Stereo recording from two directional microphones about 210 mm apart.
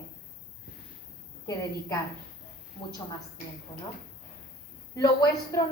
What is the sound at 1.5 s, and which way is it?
Speech, 15° left (ahead or behind).